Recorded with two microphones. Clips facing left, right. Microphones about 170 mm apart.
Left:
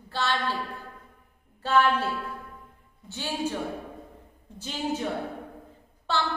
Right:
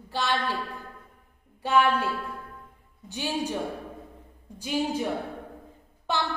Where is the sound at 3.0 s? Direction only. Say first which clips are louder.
Right 3 dB; 15° right (ahead or behind).